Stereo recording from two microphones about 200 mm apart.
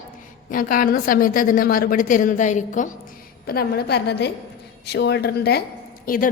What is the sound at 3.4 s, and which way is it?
A woman's voice, 50° left (ahead or behind).